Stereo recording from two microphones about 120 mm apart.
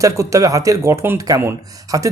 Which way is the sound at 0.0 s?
25° right (ahead or behind).